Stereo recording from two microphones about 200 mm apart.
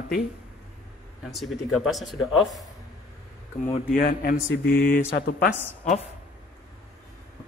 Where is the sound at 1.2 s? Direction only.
Centre (ahead or behind).